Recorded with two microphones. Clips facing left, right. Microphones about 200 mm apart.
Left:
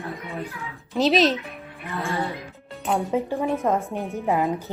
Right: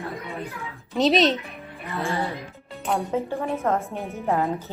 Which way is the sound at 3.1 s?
15° left (ahead or behind).